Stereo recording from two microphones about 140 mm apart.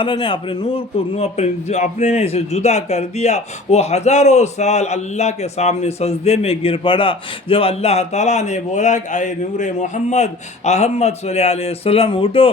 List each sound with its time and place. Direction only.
0.0 s a man's voice: 40° left (ahead or behind)